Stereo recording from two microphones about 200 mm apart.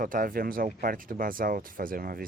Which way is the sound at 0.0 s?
45° right (ahead or behind).